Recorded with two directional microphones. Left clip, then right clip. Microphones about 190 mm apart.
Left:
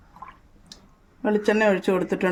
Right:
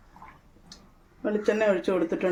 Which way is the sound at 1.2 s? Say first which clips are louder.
Left 4 dB; 60° left (ahead or behind).